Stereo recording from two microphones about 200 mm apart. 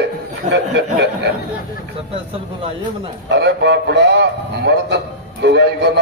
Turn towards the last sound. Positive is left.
turn(degrees=-55)  # may be behind; listen again after turning